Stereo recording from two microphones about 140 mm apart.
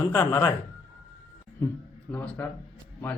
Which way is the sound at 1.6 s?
15° left (ahead or behind).